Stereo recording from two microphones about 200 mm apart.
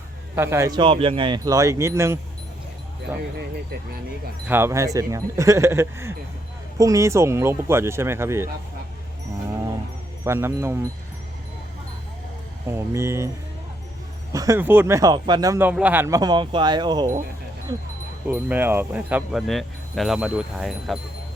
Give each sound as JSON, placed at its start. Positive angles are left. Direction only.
{"t": 0.3, "sound": "speech", "side_deg": -10}
{"t": 4.4, "sound": "speech", "side_deg": -10}
{"t": 10.2, "sound": "speech", "side_deg": -15}
{"t": 12.6, "sound": "speech", "side_deg": -10}
{"t": 14.3, "sound": "speech", "side_deg": -15}
{"t": 18.3, "sound": "speech", "side_deg": -10}